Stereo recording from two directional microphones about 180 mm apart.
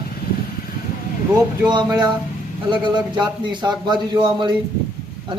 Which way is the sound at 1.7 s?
25° right (ahead or behind).